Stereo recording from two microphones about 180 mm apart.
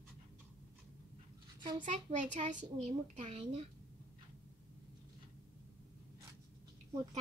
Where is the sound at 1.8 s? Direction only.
45° right (ahead or behind).